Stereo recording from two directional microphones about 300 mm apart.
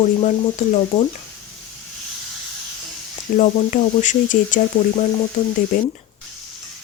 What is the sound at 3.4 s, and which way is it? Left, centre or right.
Speech, left.